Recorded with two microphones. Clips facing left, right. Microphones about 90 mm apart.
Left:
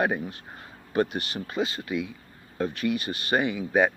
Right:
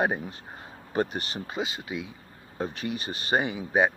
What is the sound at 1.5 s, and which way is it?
Speech, 20° right (ahead or behind).